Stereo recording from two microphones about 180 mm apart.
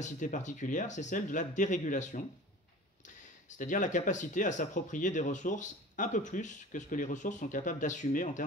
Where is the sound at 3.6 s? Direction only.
45° left (ahead or behind).